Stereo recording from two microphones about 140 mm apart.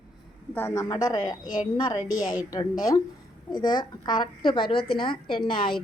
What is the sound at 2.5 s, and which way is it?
A woman's voice, 25° left (ahead or behind).